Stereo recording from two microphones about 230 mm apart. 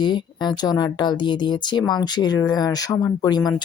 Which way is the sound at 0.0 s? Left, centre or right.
Centre.